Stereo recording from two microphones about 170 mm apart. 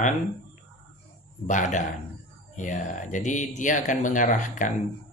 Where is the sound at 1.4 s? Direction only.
45° left (ahead or behind).